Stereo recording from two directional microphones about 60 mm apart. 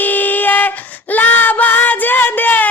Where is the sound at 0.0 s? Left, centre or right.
Left.